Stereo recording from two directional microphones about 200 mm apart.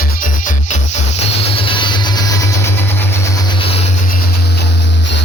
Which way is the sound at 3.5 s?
25° left (ahead or behind).